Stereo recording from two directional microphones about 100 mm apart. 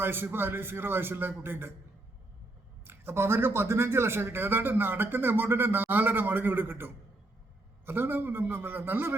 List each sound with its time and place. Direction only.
0.0 s speech: 20° right (ahead or behind)
2.8 s speech: 25° right (ahead or behind)